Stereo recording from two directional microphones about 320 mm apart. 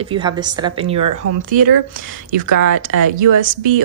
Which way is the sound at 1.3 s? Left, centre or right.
Right.